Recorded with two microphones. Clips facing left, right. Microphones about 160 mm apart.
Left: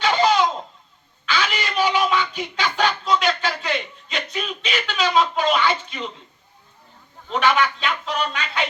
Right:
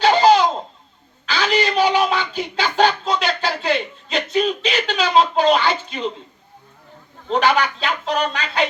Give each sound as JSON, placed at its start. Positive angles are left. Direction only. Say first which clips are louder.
{"t": 0.0, "sound": "baby laughter", "louder": "right 5 dB", "side_deg": -35}
{"t": 1.2, "sound": "a sound", "louder": "right 5 dB", "side_deg": -35}
{"t": 7.3, "sound": "speech", "louder": "right 2 dB", "side_deg": -35}